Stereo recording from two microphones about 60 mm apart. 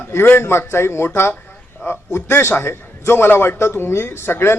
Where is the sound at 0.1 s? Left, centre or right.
Left.